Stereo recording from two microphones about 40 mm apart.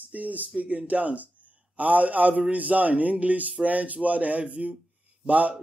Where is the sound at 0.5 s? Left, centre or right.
Right.